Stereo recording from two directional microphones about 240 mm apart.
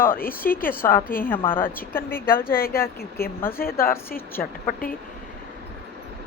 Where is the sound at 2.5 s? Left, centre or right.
Left.